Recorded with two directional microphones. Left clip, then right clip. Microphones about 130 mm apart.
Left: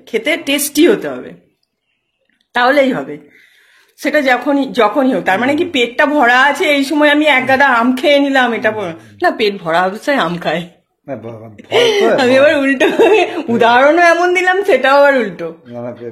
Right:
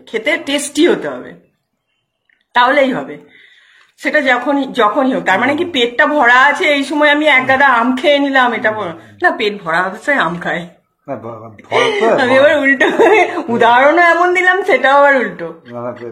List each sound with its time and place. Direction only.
0.0 s speech: 75° left (ahead or behind)
4.0 s speech: 85° left
11.8 s speech: 90° left; by 14.8 s 55° left (ahead or behind)
14.8 s speech: 70° left (ahead or behind)